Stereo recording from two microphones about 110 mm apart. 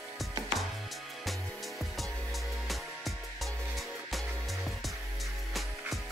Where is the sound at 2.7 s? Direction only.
Centre (ahead or behind).